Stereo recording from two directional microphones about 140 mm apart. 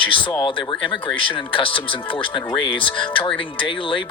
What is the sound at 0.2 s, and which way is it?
Speech, 35° left (ahead or behind).